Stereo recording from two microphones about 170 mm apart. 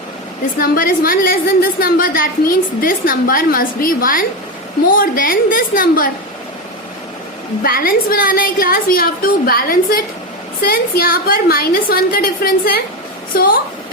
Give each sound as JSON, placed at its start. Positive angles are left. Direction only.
{"t": 0.6, "sound": "a woman's voice", "side_deg": 55}
{"t": 7.6, "sound": "a woman's voice", "side_deg": 60}